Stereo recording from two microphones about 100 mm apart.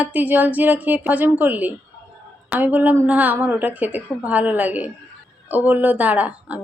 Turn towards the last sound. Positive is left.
turn(degrees=-15)  # may be behind; listen again after turning